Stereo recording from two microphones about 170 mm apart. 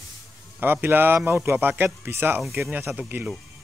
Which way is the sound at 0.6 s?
10° right (ahead or behind).